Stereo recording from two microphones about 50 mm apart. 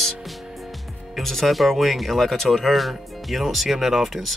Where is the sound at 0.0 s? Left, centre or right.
Centre.